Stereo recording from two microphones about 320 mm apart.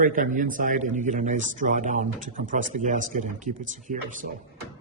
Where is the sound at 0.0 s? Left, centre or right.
Right.